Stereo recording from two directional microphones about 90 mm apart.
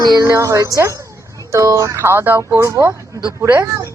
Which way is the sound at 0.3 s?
35° right (ahead or behind).